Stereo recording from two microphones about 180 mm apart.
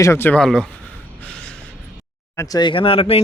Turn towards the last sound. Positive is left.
turn(degrees=30)  # may be behind; listen again after turning